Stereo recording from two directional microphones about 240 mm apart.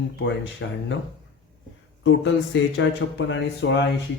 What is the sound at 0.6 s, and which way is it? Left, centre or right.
Speech, left.